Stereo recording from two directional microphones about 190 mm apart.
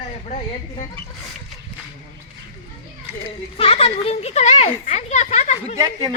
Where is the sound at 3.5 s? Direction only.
30° left (ahead or behind).